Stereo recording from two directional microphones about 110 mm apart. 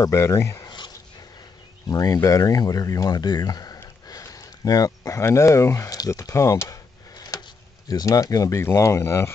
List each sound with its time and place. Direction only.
0.0 s speech: 25° left (ahead or behind)
0.7 s a sound: 40° left (ahead or behind)
1.9 s speech: 30° left (ahead or behind)